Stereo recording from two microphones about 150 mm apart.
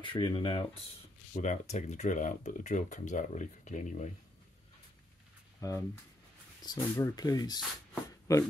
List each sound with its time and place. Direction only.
0.0 s speech: 35° left (ahead or behind)
1.3 s speech: 50° left (ahead or behind)
5.6 s speech: 20° left (ahead or behind)